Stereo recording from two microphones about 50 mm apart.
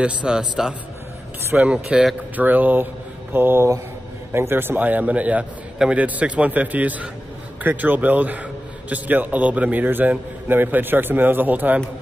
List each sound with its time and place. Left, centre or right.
0.0 s a man's voice: centre
2.3 s a man's voice: right
3.3 s mantra: right
4.3 s a man's voice: right
9.8 s a man's voice: right